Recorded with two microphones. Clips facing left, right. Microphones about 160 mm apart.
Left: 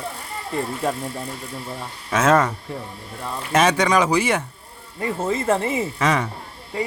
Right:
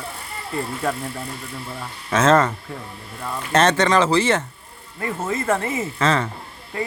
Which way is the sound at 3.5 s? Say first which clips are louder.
Right 1 dB; 10° left (ahead or behind).